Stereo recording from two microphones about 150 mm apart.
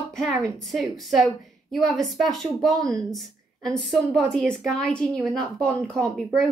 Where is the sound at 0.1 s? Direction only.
Centre (ahead or behind).